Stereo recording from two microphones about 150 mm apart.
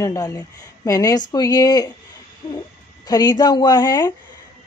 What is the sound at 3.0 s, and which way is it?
Speech, 25° left (ahead or behind).